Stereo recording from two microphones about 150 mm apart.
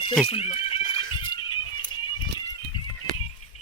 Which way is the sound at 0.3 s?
40° left (ahead or behind).